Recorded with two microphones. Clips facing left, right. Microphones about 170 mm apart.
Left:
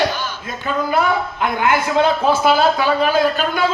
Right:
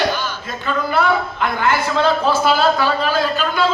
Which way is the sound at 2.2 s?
50° left (ahead or behind).